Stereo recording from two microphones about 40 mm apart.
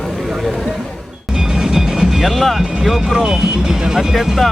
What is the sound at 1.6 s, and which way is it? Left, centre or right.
Music, centre.